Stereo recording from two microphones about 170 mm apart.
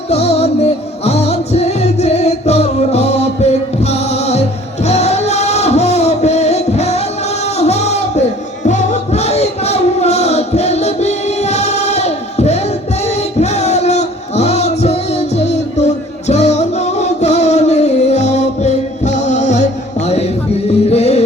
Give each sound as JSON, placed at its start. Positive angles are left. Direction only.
{"t": 0.1, "sound": "music", "side_deg": 40}
{"t": 7.6, "sound": "a sound", "side_deg": 40}
{"t": 8.6, "sound": "music", "side_deg": 45}
{"t": 20.9, "sound": "music", "side_deg": 40}